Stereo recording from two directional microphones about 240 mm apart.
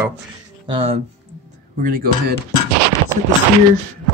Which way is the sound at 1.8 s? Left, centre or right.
Right.